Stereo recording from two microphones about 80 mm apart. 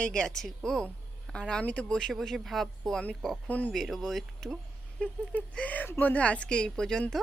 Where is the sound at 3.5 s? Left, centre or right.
Centre.